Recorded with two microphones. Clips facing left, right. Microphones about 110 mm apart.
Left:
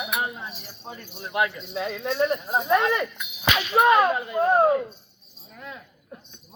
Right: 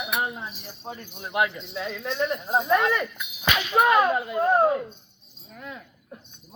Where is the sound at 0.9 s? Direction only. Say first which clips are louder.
Right 1 dB; 15° right (ahead or behind).